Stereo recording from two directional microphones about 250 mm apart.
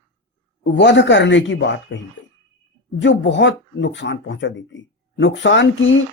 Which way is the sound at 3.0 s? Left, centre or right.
Left.